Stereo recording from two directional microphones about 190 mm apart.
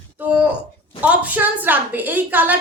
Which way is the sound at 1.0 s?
10° right (ahead or behind).